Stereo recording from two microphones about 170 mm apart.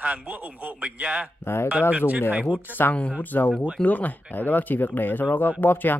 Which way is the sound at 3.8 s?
10° left (ahead or behind).